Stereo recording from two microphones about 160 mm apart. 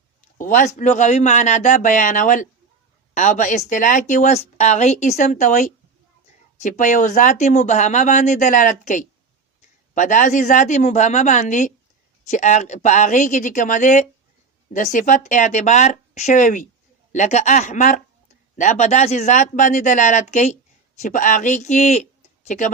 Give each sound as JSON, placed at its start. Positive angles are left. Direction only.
{"t": 0.3, "sound": "a man's voice", "side_deg": 55}